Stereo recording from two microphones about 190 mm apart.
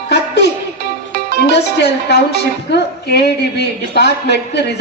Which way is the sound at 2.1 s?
60° left (ahead or behind).